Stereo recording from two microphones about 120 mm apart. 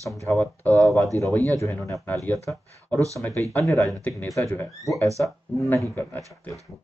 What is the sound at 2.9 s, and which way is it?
Speech, 25° right (ahead or behind).